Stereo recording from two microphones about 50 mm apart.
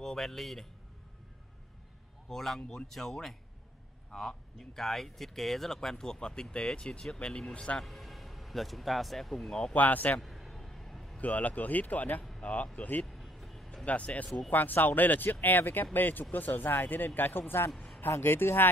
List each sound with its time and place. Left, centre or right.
0.0 s speech: centre
2.2 s a man's voice: centre
7.8 s speech: centre
9.8 s speech: left
10.2 s a sound: centre
11.1 s speech: left
12.7 s speech: left
13.0 s vehicle: centre
13.8 s speech: left